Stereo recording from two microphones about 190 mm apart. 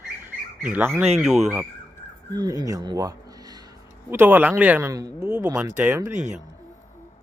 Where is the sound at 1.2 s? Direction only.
5° right (ahead or behind).